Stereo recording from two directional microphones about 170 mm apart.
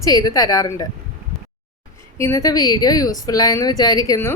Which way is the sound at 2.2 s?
20° left (ahead or behind).